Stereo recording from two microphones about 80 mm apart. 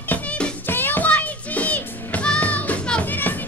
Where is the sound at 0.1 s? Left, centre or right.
Centre.